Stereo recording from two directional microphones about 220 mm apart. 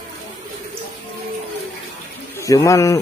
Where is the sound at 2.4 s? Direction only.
15° left (ahead or behind).